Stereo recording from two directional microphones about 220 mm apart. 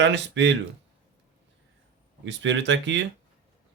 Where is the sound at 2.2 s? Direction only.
55° right (ahead or behind).